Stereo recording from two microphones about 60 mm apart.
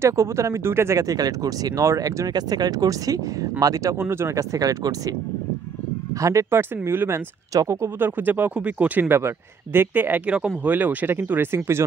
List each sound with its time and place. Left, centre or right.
0.0 s speech: right
0.9 s speech: right
2.0 s speech: right
4.0 s speech: right
4.4 s speech: right
6.5 s speech: right
8.0 s speech: right
9.1 s speech: right
11.5 s speech: right